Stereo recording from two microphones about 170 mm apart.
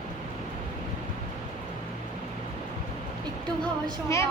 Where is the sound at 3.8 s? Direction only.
15° left (ahead or behind).